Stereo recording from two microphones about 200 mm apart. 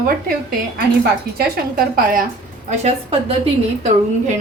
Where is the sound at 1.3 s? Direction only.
50° right (ahead or behind).